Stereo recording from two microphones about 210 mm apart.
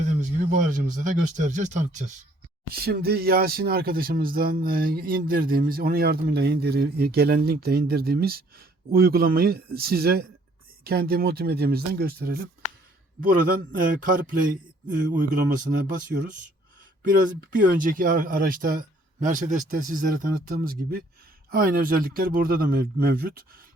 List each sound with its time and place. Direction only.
0.0 s speech: 35° right (ahead or behind)
2.6 s speech: 45° right (ahead or behind)
17.6 s speech: 40° right (ahead or behind)